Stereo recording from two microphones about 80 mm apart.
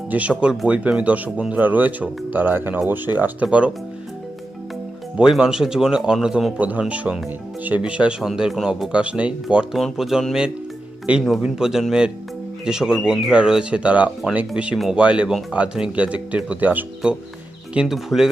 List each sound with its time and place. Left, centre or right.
0.1 s speech: centre
5.1 s speech: centre
6.6 s speech: centre
8.9 s speech: centre
9.7 s speech: centre